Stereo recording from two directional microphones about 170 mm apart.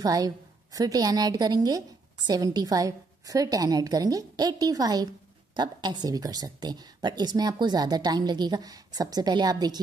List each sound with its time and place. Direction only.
0.0 s a woman's voice: 20° right (ahead or behind)